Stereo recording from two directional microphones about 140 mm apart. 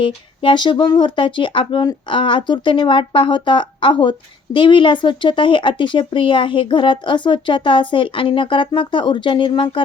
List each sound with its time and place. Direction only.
0.0 s speech: 35° left (ahead or behind)